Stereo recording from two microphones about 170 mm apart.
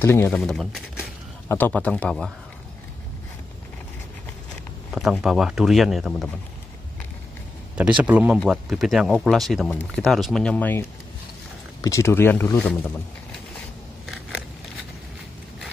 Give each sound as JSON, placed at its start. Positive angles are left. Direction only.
{"t": 0.0, "sound": "speech", "side_deg": 15}
{"t": 0.3, "sound": "speech", "side_deg": 5}
{"t": 4.9, "sound": "speech", "side_deg": 0}
{"t": 8.0, "sound": "speech", "side_deg": -10}